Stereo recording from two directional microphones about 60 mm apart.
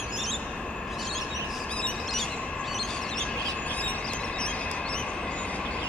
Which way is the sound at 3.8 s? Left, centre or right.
Centre.